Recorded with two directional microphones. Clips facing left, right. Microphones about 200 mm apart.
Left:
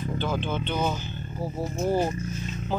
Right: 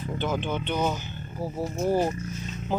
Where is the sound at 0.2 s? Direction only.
15° right (ahead or behind).